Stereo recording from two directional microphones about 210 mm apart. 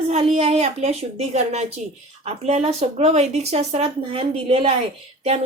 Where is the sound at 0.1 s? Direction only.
30° right (ahead or behind).